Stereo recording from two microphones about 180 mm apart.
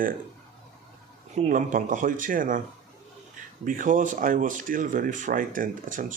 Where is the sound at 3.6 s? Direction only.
50° right (ahead or behind).